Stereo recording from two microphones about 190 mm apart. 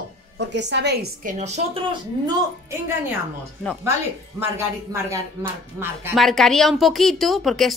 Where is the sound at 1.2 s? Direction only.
40° right (ahead or behind).